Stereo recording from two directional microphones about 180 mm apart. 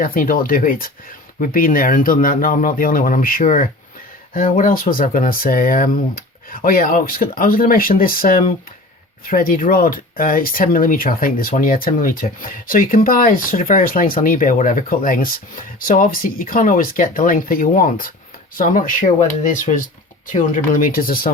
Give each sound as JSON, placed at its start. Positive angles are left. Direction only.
{"t": 0.0, "sound": "speech", "side_deg": 50}